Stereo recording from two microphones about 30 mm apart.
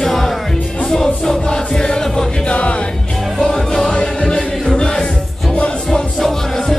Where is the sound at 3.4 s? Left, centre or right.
Centre.